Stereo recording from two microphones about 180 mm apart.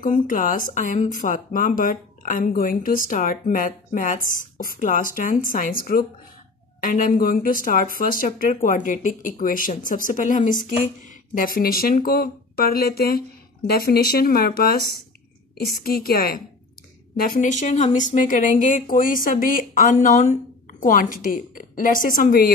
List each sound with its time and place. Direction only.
0.0 s speech: 50° left (ahead or behind)